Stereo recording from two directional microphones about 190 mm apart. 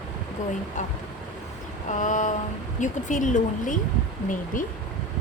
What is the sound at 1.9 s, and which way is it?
A woman's voice, 40° left (ahead or behind).